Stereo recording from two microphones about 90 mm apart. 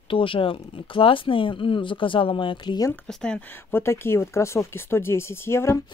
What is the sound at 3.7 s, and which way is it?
Speech, 30° left (ahead or behind).